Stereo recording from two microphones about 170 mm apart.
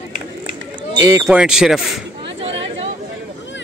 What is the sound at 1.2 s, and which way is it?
Speech, 5° right (ahead or behind).